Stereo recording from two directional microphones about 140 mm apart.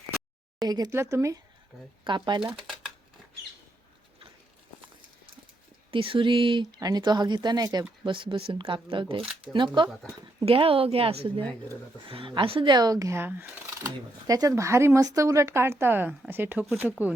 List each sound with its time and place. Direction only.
0.6 s speech: 25° right (ahead or behind)
2.0 s speech: 35° right (ahead or behind)
2.4 s speech: 5° right (ahead or behind)
5.9 s a woman's voice: 40° right (ahead or behind); by 16.6 s 15° right (ahead or behind)